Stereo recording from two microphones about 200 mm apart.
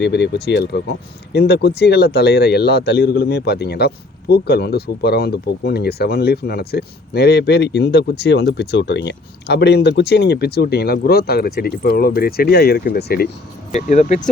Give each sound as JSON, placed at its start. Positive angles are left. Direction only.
{"t": 0.0, "sound": "speech", "side_deg": 60}
{"t": 13.7, "sound": "speech", "side_deg": 35}